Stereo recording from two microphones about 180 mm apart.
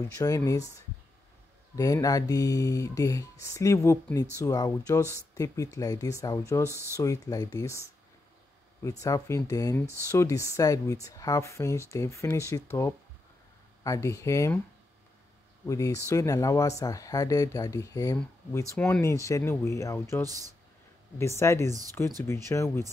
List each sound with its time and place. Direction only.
0.2 s speech: 20° left (ahead or behind)
1.8 s speech: 20° left (ahead or behind)
6.7 s speech: 15° right (ahead or behind)
7.0 s speech: 20° left (ahead or behind)
9.0 s speech: 20° left (ahead or behind)
15.6 s speech: 20° left (ahead or behind)